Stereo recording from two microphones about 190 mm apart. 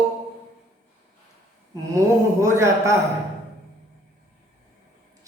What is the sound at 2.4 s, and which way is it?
Speech, 15° right (ahead or behind).